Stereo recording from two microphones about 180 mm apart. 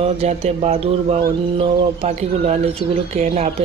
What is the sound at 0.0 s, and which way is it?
A man's voice, 35° right (ahead or behind).